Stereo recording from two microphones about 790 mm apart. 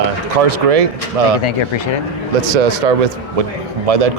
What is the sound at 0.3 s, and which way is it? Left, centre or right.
Speech, right.